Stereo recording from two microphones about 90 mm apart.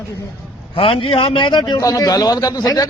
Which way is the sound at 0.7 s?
75° left (ahead or behind).